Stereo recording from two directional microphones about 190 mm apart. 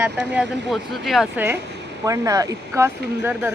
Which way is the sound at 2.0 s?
20° right (ahead or behind).